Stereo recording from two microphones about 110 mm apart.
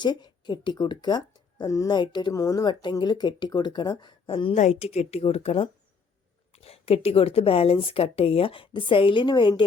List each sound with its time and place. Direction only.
0.0 s speech: 40° left (ahead or behind)
2.0 s speech: 45° left (ahead or behind)
2.3 s speech: 30° left (ahead or behind)
4.3 s speech: 55° left (ahead or behind)
4.5 s a woman's voice: 80° left; by 9.6 s 45° left (ahead or behind)